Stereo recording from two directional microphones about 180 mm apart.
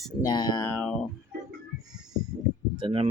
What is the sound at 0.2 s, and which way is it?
Speech, 25° left (ahead or behind).